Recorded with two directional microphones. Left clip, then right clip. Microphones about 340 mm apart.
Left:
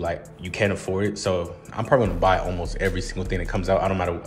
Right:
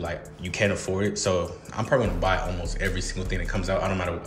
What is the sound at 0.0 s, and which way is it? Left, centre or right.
Speech, centre.